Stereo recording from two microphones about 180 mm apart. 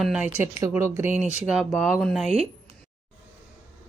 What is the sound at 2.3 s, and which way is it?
Speech, 35° right (ahead or behind).